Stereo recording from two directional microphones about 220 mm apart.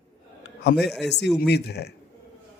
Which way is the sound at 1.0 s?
50° left (ahead or behind).